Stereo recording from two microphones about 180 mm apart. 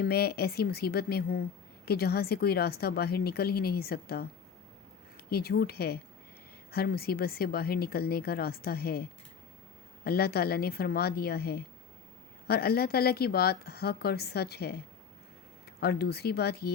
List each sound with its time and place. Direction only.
0.0 s a woman's voice: 60° left (ahead or behind)
15.8 s a woman's voice: 60° left (ahead or behind)